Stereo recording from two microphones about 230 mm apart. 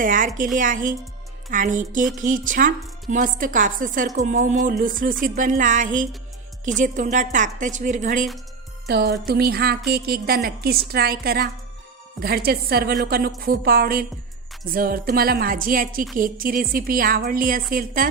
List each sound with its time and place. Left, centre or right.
0.0 s a woman's voice: right
8.9 s a woman's voice: right